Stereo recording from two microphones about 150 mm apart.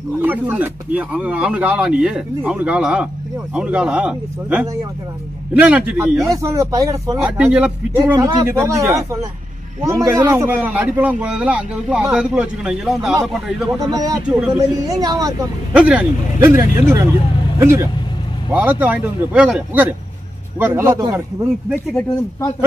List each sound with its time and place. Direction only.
0.2 s a man's voice: 10° right (ahead or behind)
6.2 s speech: 20° right (ahead or behind)
7.2 s a man's voice: 5° right (ahead or behind)
13.7 s speech: 25° right (ahead or behind)
14.2 s a man's voice: 5° right (ahead or behind)
14.9 s speech: 25° right (ahead or behind)
15.7 s a man's voice: 10° right (ahead or behind)
21.7 s speech: 15° left (ahead or behind)